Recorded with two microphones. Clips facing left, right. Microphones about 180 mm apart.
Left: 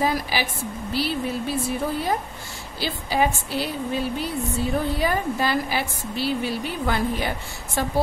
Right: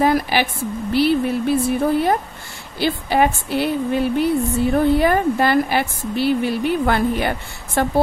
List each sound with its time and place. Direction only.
0.0 s a woman's voice: 60° right (ahead or behind)